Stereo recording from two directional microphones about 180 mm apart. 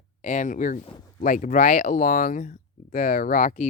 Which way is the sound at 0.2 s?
45° left (ahead or behind).